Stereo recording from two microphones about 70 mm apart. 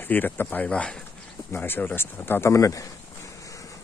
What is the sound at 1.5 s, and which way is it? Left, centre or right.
Speech, left.